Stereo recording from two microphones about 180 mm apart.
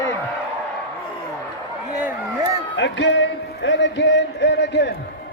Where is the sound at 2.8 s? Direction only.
85° left.